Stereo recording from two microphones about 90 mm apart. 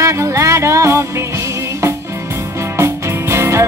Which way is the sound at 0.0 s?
35° right (ahead or behind).